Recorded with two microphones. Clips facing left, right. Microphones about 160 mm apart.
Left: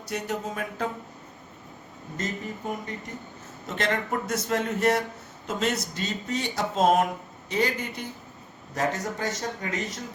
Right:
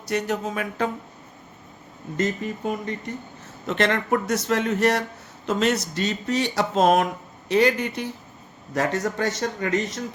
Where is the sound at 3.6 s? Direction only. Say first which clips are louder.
Right 5 dB; 75° right (ahead or behind).